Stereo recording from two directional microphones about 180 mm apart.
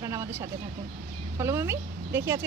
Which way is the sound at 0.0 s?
15° right (ahead or behind).